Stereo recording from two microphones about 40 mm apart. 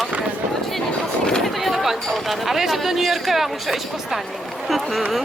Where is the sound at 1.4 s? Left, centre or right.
Centre.